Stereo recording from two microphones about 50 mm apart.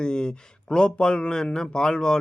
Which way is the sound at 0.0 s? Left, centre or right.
Centre.